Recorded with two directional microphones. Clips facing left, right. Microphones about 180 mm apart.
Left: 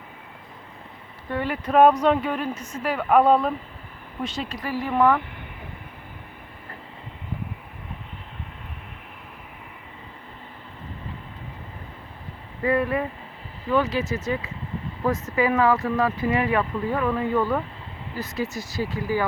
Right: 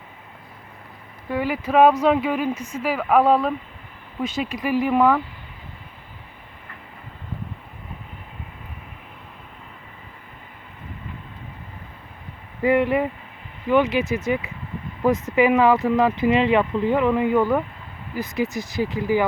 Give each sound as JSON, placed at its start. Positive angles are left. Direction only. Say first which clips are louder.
{"t": 1.3, "sound": "speech", "louder": "right 2 dB", "side_deg": -10}
{"t": 12.6, "sound": "speech", "louder": "right 4 dB", "side_deg": -20}